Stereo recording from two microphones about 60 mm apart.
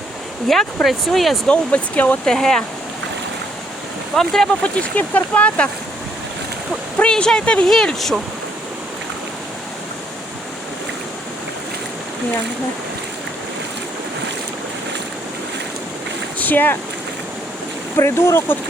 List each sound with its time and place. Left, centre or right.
0.4 s speech: centre
1.5 s speech: left
2.2 s speech: centre
4.1 s speech: centre
4.6 s speech: left
7.0 s speech: centre
7.7 s speech: centre
16.4 s speech: left
17.9 s speech: left